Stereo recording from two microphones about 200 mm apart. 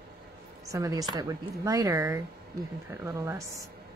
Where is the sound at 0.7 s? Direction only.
20° right (ahead or behind).